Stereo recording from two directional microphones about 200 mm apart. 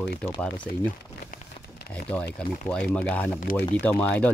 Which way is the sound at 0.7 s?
50° left (ahead or behind).